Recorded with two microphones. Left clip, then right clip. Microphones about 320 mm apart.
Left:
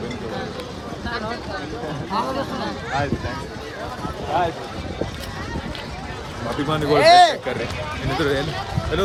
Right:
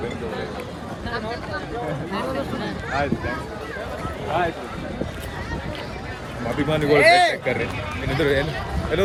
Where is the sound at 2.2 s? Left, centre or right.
Centre.